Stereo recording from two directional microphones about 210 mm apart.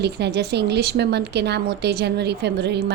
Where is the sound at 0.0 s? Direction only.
55° right (ahead or behind).